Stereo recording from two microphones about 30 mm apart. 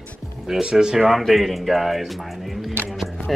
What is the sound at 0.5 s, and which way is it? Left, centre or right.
Speech, right.